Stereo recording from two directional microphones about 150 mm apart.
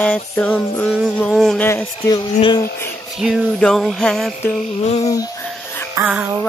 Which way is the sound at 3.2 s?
Centre (ahead or behind).